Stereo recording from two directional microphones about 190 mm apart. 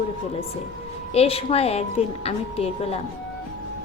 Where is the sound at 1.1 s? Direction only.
30° left (ahead or behind).